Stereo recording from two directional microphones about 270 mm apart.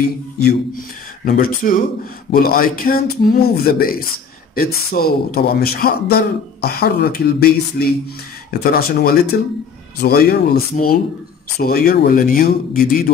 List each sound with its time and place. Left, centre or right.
0.0 s a man's voice: left